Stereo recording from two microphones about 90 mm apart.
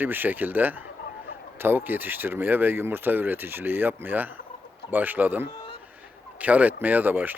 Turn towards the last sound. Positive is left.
turn(degrees=-20)  # may be behind; listen again after turning